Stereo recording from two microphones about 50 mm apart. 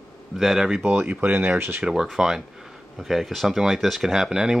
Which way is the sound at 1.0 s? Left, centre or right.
Right.